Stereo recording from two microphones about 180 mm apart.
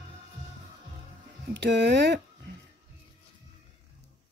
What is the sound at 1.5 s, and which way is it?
Speech, 75° right (ahead or behind).